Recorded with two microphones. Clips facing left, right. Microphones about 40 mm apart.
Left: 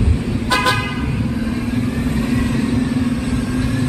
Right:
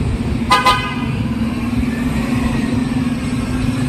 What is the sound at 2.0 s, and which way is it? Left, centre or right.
Vehicle, right.